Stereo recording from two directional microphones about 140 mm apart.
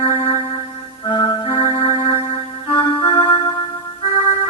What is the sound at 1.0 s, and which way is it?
Music, 35° left (ahead or behind).